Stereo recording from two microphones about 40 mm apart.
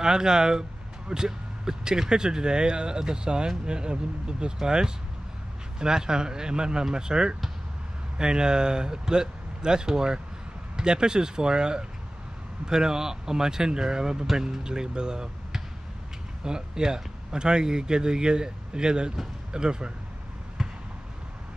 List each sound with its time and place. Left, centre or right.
0.0 s speech: centre
20.6 s basketball bounce: centre